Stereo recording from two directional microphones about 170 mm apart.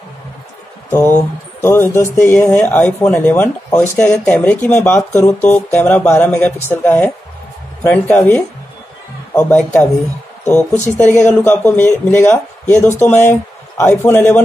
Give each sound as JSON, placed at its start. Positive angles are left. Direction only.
{"t": 1.6, "sound": "speech", "side_deg": 15}
{"t": 9.3, "sound": "a man's voice", "side_deg": 15}